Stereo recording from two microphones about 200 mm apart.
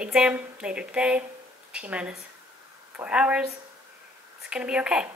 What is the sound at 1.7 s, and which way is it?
Speech, 5° right (ahead or behind).